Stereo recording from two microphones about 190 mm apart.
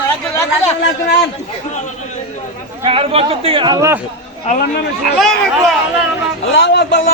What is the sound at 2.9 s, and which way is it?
Speech, 30° right (ahead or behind).